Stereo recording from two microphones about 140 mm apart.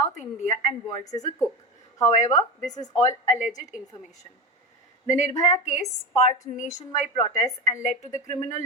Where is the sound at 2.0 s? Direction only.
55° left (ahead or behind).